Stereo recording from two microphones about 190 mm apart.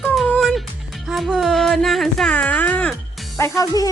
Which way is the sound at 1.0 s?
Centre (ahead or behind).